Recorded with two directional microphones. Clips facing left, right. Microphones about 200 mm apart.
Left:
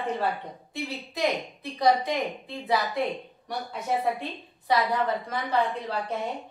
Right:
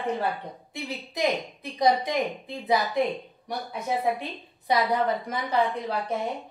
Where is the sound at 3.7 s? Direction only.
15° right (ahead or behind).